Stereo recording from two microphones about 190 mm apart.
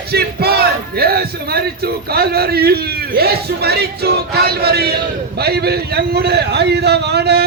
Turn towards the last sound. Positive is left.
turn(degrees=-60)  # may be behind; listen again after turning